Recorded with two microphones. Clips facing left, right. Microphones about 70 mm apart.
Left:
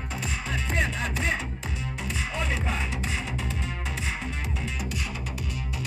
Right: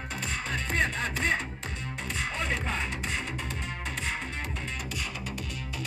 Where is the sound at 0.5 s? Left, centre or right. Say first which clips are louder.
Even; centre.